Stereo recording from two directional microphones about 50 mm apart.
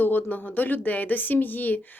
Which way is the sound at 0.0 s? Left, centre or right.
Left.